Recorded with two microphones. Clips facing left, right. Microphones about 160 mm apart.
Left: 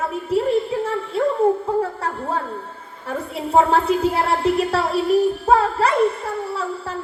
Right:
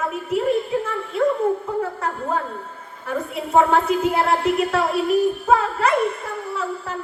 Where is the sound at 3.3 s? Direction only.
30° left (ahead or behind).